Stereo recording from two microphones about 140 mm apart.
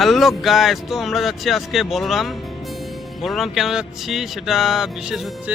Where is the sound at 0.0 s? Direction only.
Centre (ahead or behind).